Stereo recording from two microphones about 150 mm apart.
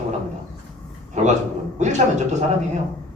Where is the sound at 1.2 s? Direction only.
50° right (ahead or behind).